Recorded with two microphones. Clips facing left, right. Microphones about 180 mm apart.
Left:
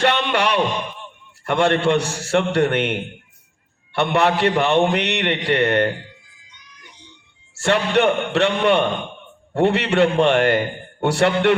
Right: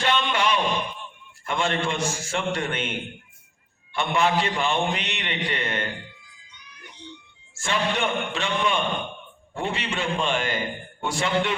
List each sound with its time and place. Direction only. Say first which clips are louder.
0.0 s a sound: left 5 dB; 65° left (ahead or behind)
1.5 s a man's voice: left 8 dB; 65° left (ahead or behind)
7.5 s a man's voice: left 8 dB; 70° left (ahead or behind)